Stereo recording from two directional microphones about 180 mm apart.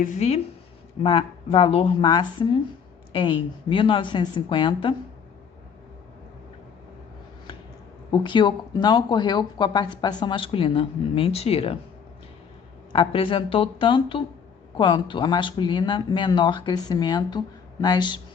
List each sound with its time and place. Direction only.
0.0 s speech: 40° left (ahead or behind)
8.1 s speech: 25° left (ahead or behind)
12.9 s speech: 30° left (ahead or behind)